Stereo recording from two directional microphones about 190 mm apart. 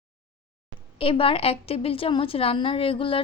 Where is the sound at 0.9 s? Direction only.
30° left (ahead or behind).